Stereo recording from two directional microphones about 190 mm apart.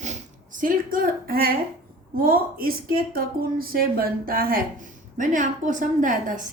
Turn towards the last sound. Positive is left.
turn(degrees=-45)  # may be behind; listen again after turning